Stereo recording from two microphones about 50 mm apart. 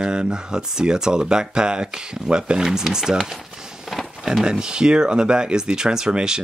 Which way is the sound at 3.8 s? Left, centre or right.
Centre.